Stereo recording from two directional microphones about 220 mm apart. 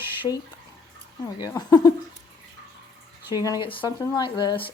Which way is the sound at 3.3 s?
15° left (ahead or behind).